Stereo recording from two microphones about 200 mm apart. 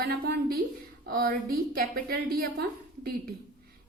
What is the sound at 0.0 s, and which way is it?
A woman's voice, 50° right (ahead or behind).